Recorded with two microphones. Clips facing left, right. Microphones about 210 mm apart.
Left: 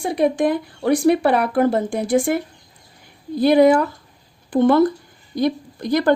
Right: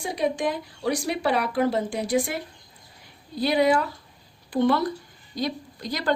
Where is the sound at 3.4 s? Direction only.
50° left (ahead or behind).